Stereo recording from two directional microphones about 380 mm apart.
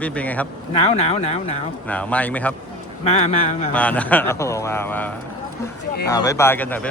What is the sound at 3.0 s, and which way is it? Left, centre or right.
Speech, centre.